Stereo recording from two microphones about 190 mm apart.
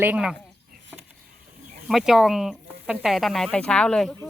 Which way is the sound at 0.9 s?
5° right (ahead or behind).